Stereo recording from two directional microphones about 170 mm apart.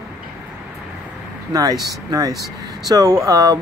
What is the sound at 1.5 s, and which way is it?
Speech, 20° right (ahead or behind).